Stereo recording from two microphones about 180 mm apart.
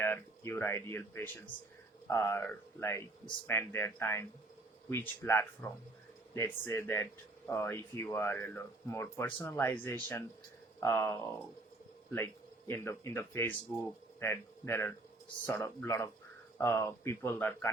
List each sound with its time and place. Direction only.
0.0 s speech: 15° left (ahead or behind)